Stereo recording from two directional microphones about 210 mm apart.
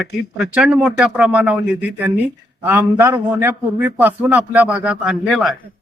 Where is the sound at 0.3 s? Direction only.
5° right (ahead or behind).